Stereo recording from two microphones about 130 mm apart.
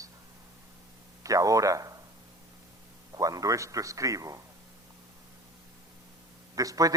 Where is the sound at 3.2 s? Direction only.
25° right (ahead or behind).